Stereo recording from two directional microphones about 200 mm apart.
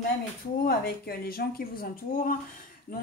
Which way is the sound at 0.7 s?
50° left (ahead or behind).